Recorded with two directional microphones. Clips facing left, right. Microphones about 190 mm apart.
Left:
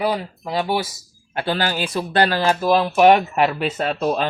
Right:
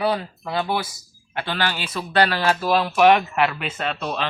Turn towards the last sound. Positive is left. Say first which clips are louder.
# left 6 dB
turn(degrees=40)  # may be behind; listen again after turning